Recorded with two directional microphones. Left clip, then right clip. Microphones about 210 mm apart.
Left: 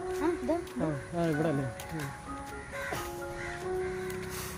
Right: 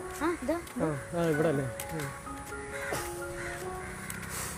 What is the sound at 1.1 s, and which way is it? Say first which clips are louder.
Speech: right 3 dB; 10° right (ahead or behind).